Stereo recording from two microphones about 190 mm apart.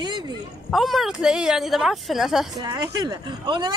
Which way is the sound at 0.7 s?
Centre (ahead or behind).